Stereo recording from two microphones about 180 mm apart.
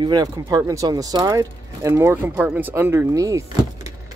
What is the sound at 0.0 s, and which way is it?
Speech, 20° right (ahead or behind).